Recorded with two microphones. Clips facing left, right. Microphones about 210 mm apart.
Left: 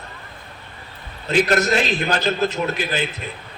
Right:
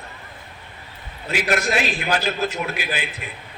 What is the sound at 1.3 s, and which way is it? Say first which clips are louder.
A man's voice: left 4 dB; 10° right (ahead or behind).